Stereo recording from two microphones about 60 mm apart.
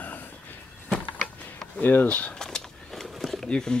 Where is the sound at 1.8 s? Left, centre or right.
Left.